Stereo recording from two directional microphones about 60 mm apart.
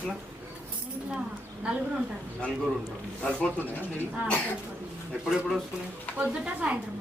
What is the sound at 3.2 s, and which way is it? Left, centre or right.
Speech, centre.